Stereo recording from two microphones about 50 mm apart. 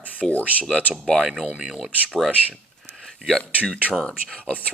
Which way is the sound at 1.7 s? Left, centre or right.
Centre.